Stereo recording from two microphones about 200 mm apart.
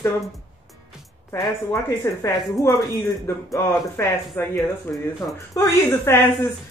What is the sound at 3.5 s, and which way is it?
Speech, 10° left (ahead or behind).